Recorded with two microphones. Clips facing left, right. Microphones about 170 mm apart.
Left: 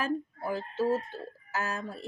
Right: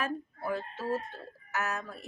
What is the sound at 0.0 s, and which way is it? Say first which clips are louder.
Speech: left 3 dB; 30° left (ahead or behind).